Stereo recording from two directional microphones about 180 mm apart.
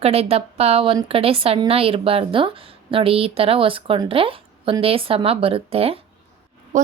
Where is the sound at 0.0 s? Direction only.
35° right (ahead or behind).